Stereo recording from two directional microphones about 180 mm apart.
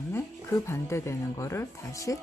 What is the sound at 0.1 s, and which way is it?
Speech, 15° left (ahead or behind).